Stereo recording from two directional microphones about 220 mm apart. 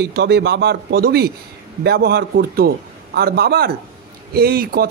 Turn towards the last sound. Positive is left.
turn(degrees=-45)  # may be behind; listen again after turning